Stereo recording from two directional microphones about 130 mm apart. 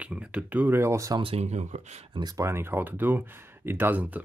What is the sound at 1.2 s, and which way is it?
Speech, 55° right (ahead or behind).